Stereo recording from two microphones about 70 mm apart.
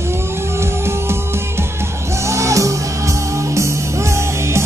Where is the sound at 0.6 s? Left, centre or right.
Right.